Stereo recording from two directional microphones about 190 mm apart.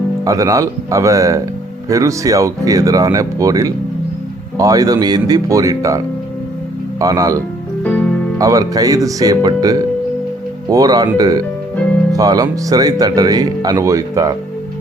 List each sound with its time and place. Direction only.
0.3 s speech: 15° right (ahead or behind)
7.0 s speech: 20° right (ahead or behind)